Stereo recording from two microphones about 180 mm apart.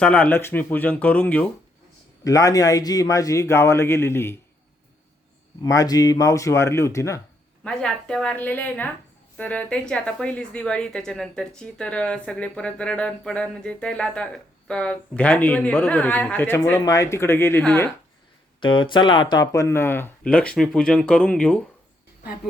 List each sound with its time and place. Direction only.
0.0 s speech: 5° left (ahead or behind)
2.2 s speech: 20° left (ahead or behind)
5.6 s speech: 20° left (ahead or behind)
7.6 s a woman's voice: 5° left (ahead or behind)
18.6 s speech: 25° left (ahead or behind); by 21.6 s 5° left (ahead or behind)